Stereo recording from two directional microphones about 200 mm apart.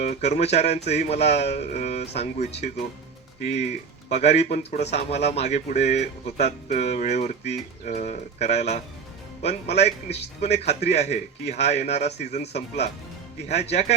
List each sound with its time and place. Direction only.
0.0 s speech: 35° left (ahead or behind)